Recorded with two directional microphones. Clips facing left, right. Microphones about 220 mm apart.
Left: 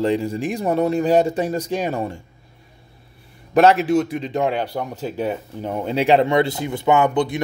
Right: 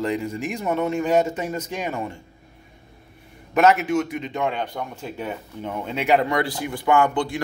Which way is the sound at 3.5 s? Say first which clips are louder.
Left 4 dB; 30° left (ahead or behind).